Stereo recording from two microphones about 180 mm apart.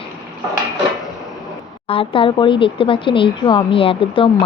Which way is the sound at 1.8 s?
30° left (ahead or behind).